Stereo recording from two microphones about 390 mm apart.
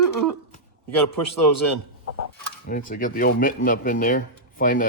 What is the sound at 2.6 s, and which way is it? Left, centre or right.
Speech, left.